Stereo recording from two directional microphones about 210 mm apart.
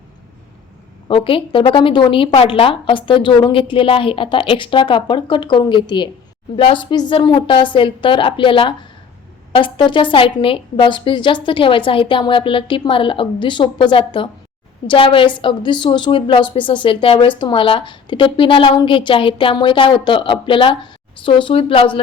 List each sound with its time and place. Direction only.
1.0 s a woman's voice: 25° left (ahead or behind)